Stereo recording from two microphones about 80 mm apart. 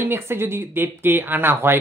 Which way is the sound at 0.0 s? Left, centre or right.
Right.